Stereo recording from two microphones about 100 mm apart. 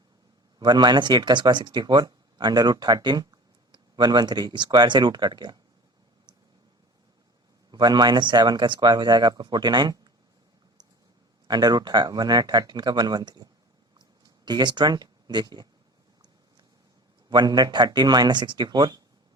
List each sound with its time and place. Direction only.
0.6 s speech: 45° right (ahead or behind)
7.7 s speech: 45° right (ahead or behind)
11.4 s speech: 45° right (ahead or behind)
17.2 s speech: 45° right (ahead or behind)